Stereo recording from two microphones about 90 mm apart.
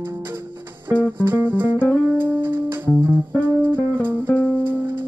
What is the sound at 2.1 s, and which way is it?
Music, 25° right (ahead or behind).